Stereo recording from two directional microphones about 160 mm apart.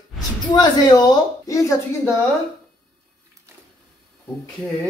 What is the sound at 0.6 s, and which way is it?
A woman's voice, 25° left (ahead or behind).